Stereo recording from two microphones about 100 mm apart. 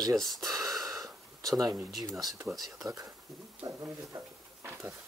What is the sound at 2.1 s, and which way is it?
Speech, 40° right (ahead or behind).